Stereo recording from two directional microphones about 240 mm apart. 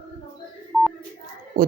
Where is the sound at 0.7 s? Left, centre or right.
Centre.